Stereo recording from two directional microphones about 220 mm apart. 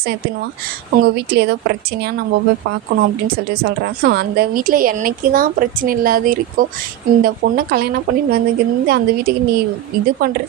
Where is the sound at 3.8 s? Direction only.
50° right (ahead or behind).